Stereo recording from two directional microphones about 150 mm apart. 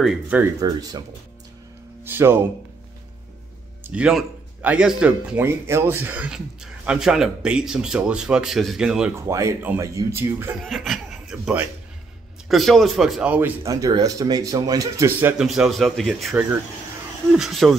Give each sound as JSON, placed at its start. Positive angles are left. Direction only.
{"t": 0.0, "sound": "speech", "side_deg": -5}
{"t": 0.6, "sound": "speech", "side_deg": -25}
{"t": 2.0, "sound": "speech", "side_deg": -15}
{"t": 3.8, "sound": "speech", "side_deg": -10}
{"t": 9.3, "sound": "speech", "side_deg": -20}
{"t": 10.6, "sound": "speech", "side_deg": 0}
{"t": 15.4, "sound": "speech", "side_deg": 0}